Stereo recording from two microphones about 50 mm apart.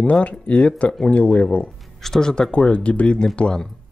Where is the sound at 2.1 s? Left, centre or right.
Centre.